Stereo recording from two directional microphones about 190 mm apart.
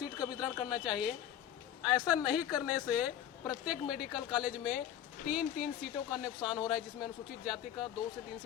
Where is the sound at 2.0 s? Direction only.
5° right (ahead or behind).